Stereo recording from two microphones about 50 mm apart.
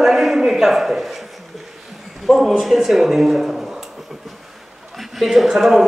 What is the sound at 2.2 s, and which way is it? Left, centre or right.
A man's voice, centre.